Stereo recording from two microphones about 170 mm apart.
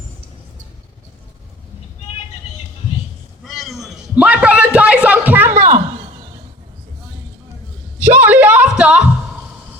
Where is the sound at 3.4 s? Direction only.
Centre (ahead or behind).